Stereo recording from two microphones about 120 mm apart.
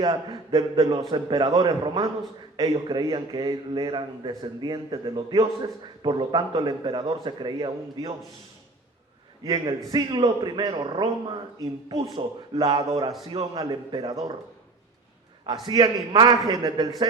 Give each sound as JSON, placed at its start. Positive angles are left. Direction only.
{"t": 0.0, "sound": "a man's voice", "side_deg": -35}
{"t": 9.4, "sound": "a man's voice", "side_deg": -35}
{"t": 15.6, "sound": "a man's voice", "side_deg": -35}